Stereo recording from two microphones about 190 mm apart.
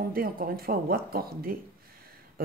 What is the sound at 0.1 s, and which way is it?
Speech, 50° right (ahead or behind).